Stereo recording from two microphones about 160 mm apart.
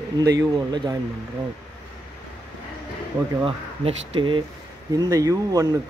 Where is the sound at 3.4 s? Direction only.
30° right (ahead or behind).